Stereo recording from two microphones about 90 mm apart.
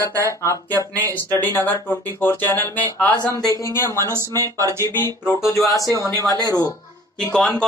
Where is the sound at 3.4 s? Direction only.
35° left (ahead or behind).